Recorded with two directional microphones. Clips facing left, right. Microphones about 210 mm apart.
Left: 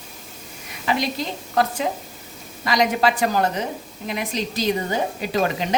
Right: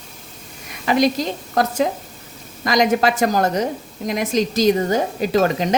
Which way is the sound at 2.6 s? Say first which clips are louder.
Right 3 dB; 45° right (ahead or behind).